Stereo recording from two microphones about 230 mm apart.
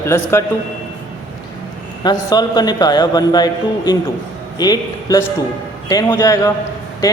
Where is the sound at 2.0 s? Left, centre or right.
Centre.